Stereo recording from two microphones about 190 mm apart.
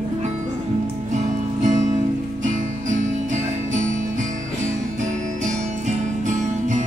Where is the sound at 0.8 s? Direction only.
40° right (ahead or behind).